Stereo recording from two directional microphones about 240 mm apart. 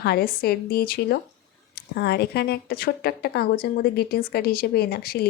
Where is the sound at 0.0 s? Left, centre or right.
Left.